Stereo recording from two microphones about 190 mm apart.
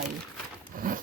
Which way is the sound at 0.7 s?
45° right (ahead or behind).